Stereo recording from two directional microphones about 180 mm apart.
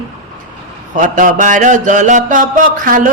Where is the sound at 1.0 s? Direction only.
45° right (ahead or behind).